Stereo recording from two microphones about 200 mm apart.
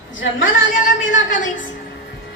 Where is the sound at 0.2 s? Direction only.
70° left (ahead or behind).